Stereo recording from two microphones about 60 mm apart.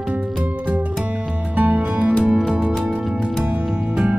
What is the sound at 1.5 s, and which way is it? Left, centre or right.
Music, right.